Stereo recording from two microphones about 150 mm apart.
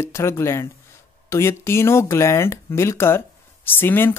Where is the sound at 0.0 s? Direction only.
15° left (ahead or behind).